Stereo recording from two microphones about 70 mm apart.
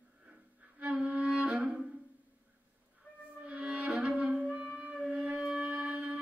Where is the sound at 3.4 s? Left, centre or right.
Centre.